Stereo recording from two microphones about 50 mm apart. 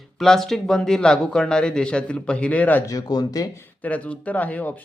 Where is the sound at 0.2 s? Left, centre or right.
Centre; by 2.8 s left.